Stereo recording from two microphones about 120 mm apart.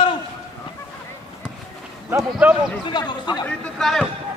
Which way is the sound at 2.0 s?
20° right (ahead or behind).